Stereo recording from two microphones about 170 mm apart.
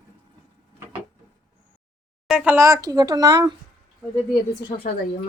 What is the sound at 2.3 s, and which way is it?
Speech, 10° right (ahead or behind).